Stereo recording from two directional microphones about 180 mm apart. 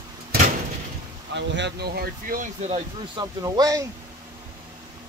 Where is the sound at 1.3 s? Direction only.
75° right (ahead or behind); by 2.8 s 40° right (ahead or behind).